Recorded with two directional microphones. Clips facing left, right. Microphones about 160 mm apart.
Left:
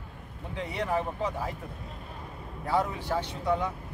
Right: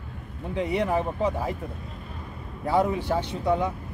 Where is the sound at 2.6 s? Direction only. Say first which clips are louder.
Right 5 dB; 15° right (ahead or behind).